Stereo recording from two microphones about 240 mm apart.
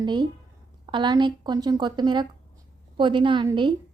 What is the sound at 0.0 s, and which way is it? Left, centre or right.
A woman's voice, centre.